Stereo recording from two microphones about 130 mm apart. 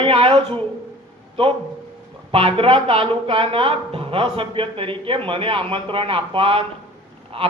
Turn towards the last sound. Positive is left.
turn(degrees=-45)  # may be behind; listen again after turning